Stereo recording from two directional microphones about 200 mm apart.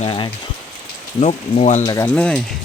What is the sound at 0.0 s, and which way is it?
Speech, 25° left (ahead or behind).